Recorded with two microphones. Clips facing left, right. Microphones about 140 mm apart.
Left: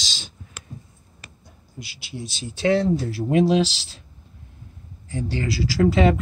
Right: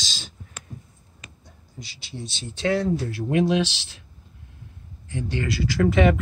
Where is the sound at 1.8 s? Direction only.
5° left (ahead or behind).